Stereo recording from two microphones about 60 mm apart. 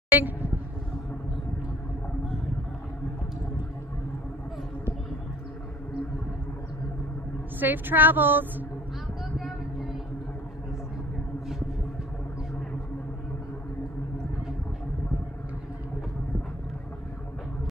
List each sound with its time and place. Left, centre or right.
0.1 s a woman's voice: right
7.6 s a woman's voice: right